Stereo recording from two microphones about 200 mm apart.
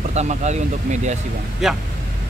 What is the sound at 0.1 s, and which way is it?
Speech, 35° right (ahead or behind).